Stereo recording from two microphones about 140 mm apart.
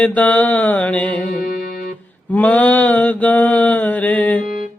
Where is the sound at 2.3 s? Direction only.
10° left (ahead or behind).